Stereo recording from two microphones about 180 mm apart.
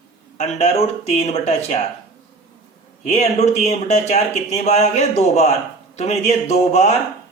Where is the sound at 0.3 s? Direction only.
40° left (ahead or behind).